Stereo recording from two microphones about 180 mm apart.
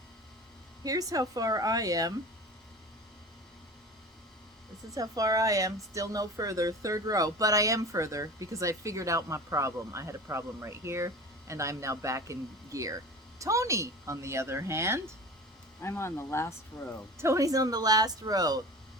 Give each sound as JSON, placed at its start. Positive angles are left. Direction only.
{"t": 0.9, "sound": "speech", "side_deg": -20}
{"t": 4.9, "sound": "speech", "side_deg": -20}
{"t": 15.8, "sound": "speech", "side_deg": 15}
{"t": 17.2, "sound": "speech", "side_deg": -15}